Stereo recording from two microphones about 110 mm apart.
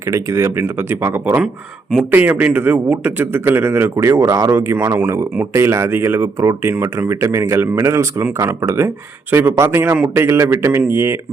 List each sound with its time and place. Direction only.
0.1 s speech: 25° right (ahead or behind)